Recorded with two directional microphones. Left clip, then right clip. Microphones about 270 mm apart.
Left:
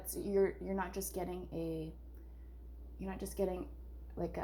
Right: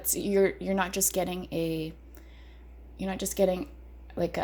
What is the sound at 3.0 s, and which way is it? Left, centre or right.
A woman's voice, right.